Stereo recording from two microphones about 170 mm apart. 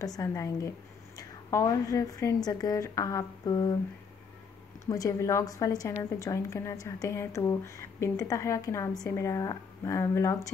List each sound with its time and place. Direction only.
0.0 s speech: 20° left (ahead or behind)
4.8 s speech: 20° left (ahead or behind)